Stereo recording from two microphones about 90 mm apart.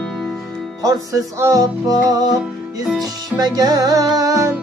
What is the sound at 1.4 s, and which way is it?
Music, 40° right (ahead or behind).